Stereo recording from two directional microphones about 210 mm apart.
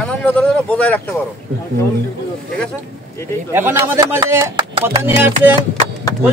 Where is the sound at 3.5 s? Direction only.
10° right (ahead or behind).